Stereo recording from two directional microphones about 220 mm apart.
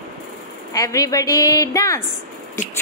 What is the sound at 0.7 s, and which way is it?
A woman's voice, 15° left (ahead or behind).